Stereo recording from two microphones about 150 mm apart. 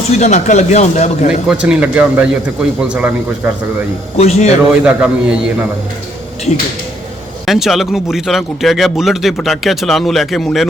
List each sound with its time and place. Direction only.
0.2 s speech: 50° left (ahead or behind)
1.5 s a man's voice: 5° right (ahead or behind)
4.2 s speech: 45° left (ahead or behind)
4.7 s a man's voice: 10° right (ahead or behind)
7.4 s speech: centre (ahead or behind)